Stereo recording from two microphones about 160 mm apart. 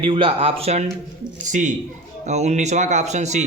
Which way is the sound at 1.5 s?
50° right (ahead or behind).